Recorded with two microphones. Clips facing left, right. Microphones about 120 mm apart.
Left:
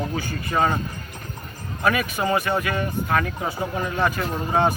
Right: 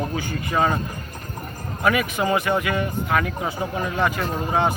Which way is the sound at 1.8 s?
20° right (ahead or behind).